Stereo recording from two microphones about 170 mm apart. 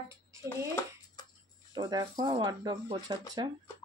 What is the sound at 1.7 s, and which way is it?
Speech, 20° right (ahead or behind).